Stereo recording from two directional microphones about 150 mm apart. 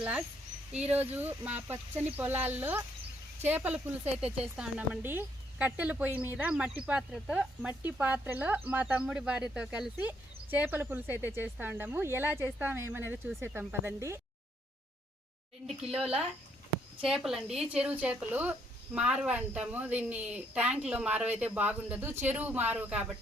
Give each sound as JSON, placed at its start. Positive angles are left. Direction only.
{"t": 0.7, "sound": "speech", "side_deg": -45}
{"t": 0.9, "sound": "speech", "side_deg": -10}
{"t": 17.0, "sound": "speech", "side_deg": 0}